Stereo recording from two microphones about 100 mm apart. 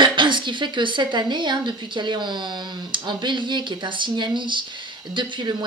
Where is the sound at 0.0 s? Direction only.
55° right (ahead or behind).